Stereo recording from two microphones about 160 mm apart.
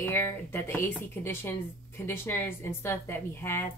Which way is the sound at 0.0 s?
15° left (ahead or behind).